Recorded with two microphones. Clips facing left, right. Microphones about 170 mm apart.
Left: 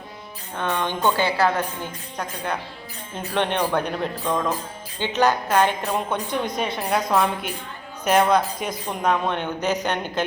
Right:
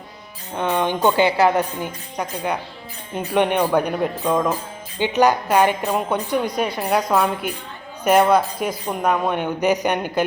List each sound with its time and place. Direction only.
0.5 s a woman's voice: 15° right (ahead or behind)